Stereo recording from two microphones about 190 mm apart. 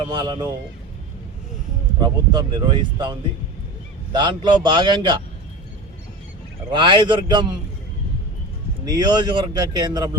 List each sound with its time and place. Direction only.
0.1 s speech: 20° right (ahead or behind)
2.0 s speech: 25° right (ahead or behind)
6.7 s speech: 25° right (ahead or behind)
8.8 s speech: 20° right (ahead or behind)